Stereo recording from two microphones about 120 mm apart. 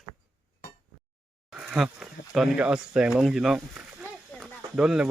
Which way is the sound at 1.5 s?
5° right (ahead or behind).